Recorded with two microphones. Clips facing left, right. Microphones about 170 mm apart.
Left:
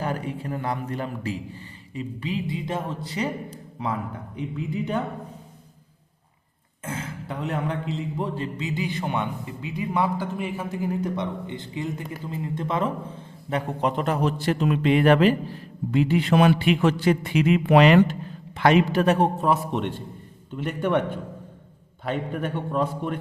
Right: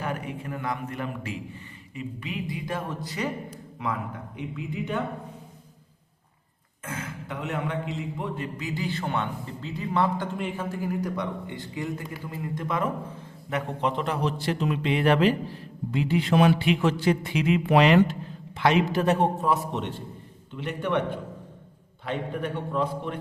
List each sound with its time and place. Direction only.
0.0 s a man's voice: 35° left (ahead or behind)
6.8 s a man's voice: 30° left (ahead or behind); by 10.7 s 5° left (ahead or behind)
10.7 s a man's voice: 20° left (ahead or behind)
13.8 s a man's voice: 45° left (ahead or behind)
20.6 s speech: 45° left (ahead or behind)
22.0 s speech: 45° left (ahead or behind)